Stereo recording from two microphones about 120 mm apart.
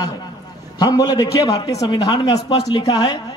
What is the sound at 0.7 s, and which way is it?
A woman's voice, 35° left (ahead or behind).